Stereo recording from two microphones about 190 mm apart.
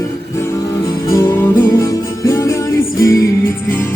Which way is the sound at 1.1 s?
15° left (ahead or behind).